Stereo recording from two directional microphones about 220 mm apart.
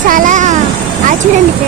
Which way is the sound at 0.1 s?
35° right (ahead or behind).